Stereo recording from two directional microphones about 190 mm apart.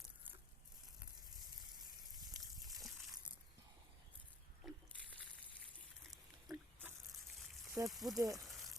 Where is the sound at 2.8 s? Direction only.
Centre (ahead or behind).